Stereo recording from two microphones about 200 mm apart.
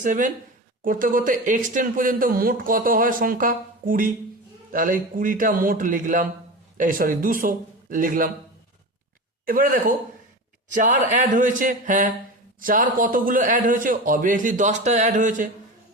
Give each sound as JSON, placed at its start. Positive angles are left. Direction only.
{"t": 0.0, "sound": "speech", "side_deg": -40}
{"t": 9.5, "sound": "speech", "side_deg": -45}